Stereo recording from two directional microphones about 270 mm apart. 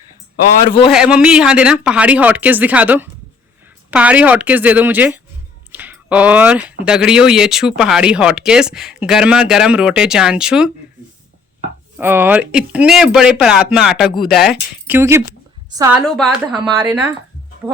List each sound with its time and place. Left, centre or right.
0.9 s speech: centre
5.7 s a sound: centre
6.8 s speech: centre
11.9 s a woman's voice: centre
16.0 s speech: centre
16.6 s speech: centre
16.8 s speech: centre